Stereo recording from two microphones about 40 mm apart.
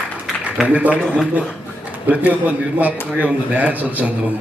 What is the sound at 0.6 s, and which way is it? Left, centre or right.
Speech, right.